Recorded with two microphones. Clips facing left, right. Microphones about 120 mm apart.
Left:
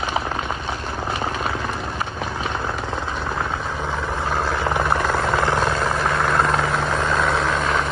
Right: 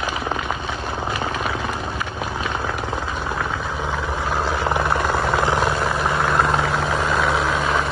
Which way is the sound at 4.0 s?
10° right (ahead or behind).